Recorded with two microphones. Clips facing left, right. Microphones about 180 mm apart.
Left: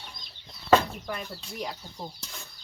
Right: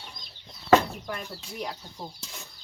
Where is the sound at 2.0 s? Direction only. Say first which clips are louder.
Even; 5° right (ahead or behind).